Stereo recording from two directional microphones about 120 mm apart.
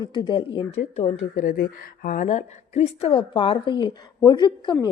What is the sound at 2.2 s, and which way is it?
A woman's voice, 90° left.